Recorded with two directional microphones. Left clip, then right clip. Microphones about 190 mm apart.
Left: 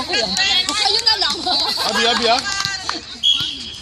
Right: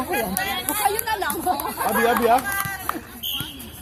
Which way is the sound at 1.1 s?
15° left (ahead or behind).